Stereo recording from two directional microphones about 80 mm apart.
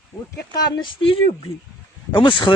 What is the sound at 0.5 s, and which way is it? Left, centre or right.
Speech, left.